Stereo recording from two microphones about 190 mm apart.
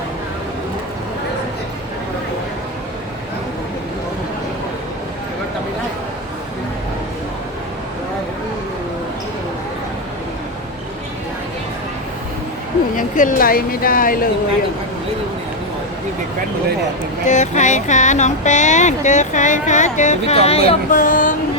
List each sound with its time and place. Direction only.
13.0 s speech: 45° left (ahead or behind)
17.2 s speech: 40° left (ahead or behind)